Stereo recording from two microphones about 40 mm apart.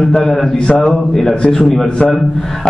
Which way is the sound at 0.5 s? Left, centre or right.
Left.